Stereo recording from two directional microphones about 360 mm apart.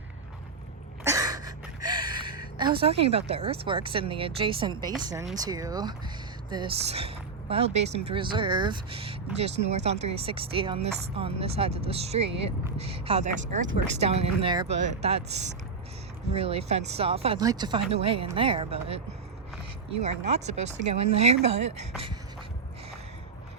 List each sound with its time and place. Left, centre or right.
1.0 s a sound: centre
4.8 s speech: centre
16.3 s speech: centre